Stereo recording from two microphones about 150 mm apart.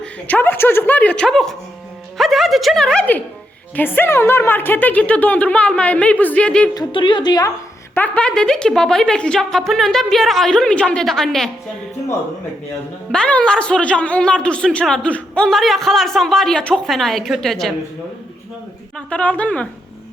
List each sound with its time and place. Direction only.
0.0 s a woman's voice: 10° left (ahead or behind)
6.7 s a woman's voice: 30° left (ahead or behind)
7.9 s speech: 10° left (ahead or behind)
13.1 s speech: 5° left (ahead or behind)
18.9 s a woman's voice: 10° left (ahead or behind)